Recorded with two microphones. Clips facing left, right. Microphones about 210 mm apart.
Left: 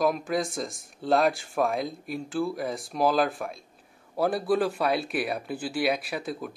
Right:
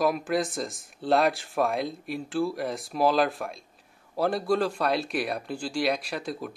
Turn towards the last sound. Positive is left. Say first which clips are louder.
# even
turn(degrees=0)  # may be behind; listen again after turning